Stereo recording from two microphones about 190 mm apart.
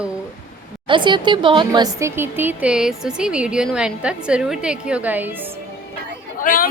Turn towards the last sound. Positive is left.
turn(degrees=45)  # may be behind; listen again after turning